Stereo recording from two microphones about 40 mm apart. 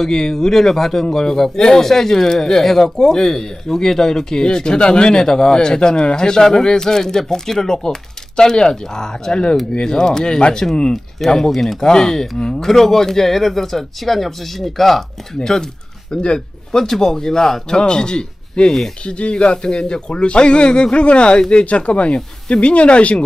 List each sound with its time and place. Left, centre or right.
0.0 s speech: centre
12.6 s speech: centre; by 16.3 s left
16.3 s speech: centre; by 23.2 s left